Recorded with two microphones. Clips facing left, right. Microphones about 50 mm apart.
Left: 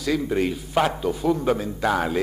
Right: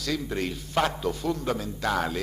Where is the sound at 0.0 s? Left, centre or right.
Centre.